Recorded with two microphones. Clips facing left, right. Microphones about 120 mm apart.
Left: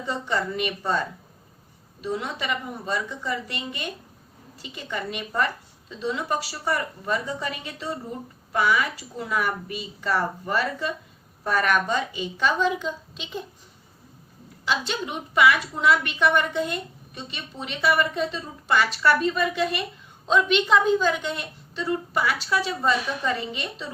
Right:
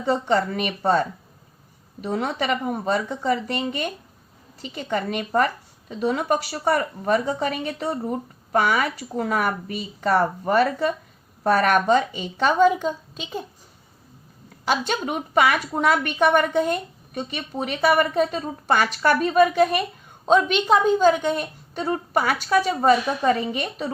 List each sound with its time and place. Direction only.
0.3 s a woman's voice: 50° right (ahead or behind)
4.8 s a woman's voice: 50° right (ahead or behind)
14.6 s a woman's voice: 45° right (ahead or behind)